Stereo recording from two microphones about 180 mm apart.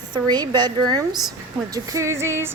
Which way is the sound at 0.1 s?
25° right (ahead or behind).